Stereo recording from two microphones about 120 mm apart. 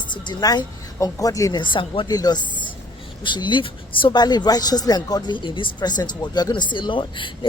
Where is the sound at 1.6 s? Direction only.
45° left (ahead or behind).